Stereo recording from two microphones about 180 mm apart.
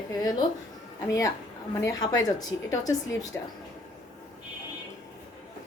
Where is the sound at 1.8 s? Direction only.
20° left (ahead or behind).